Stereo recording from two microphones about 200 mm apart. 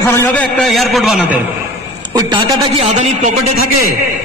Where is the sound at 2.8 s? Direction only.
35° right (ahead or behind).